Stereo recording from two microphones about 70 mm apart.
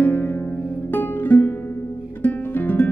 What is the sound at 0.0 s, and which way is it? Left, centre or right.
Music, left.